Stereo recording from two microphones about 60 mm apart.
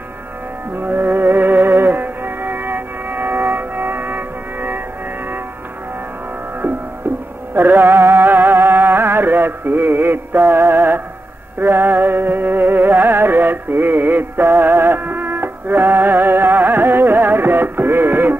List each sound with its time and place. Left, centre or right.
0.7 s music: right
7.5 s music: right